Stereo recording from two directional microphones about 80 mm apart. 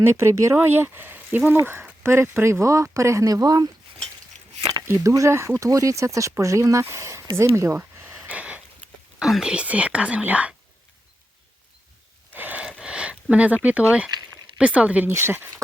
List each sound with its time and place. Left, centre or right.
0.0 s speech: right
5.0 s speech: right
8.0 s a sound: centre
9.1 s speech: centre
12.3 s a sound: right
13.3 s speech: centre
15.0 s speech: right